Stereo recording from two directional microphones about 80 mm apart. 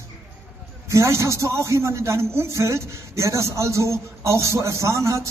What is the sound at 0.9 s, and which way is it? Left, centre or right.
A man's voice, right.